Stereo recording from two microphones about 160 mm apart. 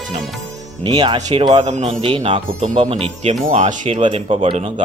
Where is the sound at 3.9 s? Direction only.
35° right (ahead or behind).